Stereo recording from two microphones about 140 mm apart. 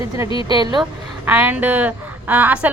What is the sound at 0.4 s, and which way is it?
Speech, 30° right (ahead or behind).